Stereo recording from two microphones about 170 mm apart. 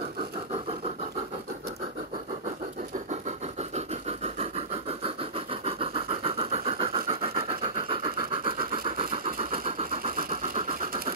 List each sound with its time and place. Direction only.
3.1 s a sound: 40° right (ahead or behind)
8.8 s vehicle: 30° right (ahead or behind)
10.5 s vehicle: 55° right (ahead or behind)